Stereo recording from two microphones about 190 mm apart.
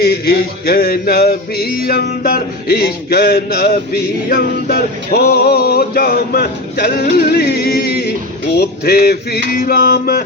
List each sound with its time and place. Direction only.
0.0 s music: 55° left (ahead or behind)